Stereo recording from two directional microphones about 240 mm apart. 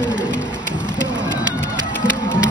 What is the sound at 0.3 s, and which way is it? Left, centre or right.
Music, right.